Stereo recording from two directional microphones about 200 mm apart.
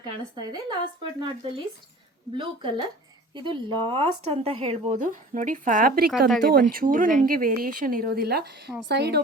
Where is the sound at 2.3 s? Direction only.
25° right (ahead or behind); by 6.1 s 45° right (ahead or behind).